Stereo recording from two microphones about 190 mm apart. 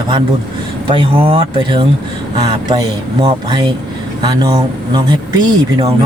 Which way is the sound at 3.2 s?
25° right (ahead or behind).